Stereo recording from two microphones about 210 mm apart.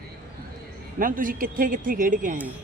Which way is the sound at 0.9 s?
40° right (ahead or behind).